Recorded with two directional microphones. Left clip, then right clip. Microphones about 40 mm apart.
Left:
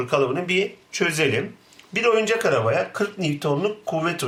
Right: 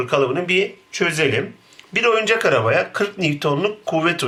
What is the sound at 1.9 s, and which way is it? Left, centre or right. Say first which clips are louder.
Speech: right 3 dB; centre.